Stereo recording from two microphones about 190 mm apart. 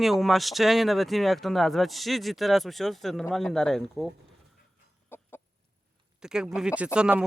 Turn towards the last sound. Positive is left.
turn(degrees=-5)  # may be behind; listen again after turning